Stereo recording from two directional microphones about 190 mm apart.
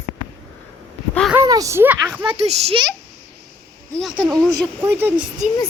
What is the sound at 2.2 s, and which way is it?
Speech, 35° right (ahead or behind).